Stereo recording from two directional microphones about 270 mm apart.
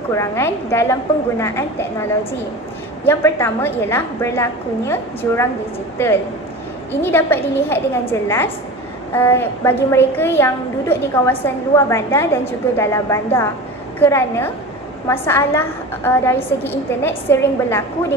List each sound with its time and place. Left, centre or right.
0.1 s a woman's voice: centre
3.1 s a woman's voice: centre